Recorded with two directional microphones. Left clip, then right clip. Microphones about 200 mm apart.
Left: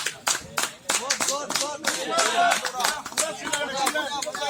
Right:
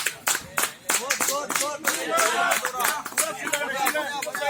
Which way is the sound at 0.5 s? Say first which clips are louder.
Right 1 dB; 55° left (ahead or behind).